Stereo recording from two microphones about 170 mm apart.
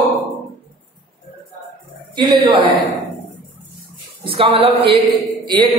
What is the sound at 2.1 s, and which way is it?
Speech, 30° right (ahead or behind).